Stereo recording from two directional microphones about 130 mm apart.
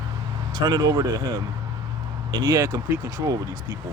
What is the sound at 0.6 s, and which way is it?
Speech, 30° right (ahead or behind).